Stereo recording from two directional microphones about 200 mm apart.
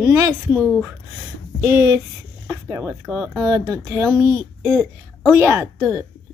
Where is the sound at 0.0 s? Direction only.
15° right (ahead or behind).